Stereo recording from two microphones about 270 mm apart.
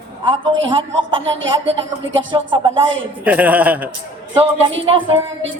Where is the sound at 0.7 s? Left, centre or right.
Centre.